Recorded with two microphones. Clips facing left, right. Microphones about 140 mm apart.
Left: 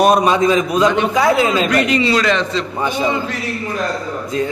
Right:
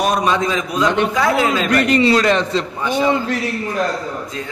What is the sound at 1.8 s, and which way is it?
Speech, 50° right (ahead or behind).